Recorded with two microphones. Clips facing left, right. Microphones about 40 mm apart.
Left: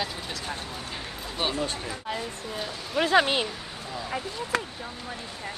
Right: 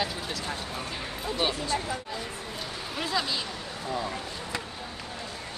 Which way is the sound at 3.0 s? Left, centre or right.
Left.